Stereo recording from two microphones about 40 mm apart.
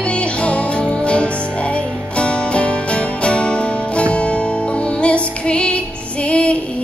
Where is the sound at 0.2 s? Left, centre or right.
Left.